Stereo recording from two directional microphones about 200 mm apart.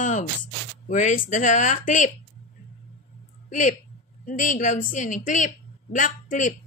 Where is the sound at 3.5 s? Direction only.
35° left (ahead or behind).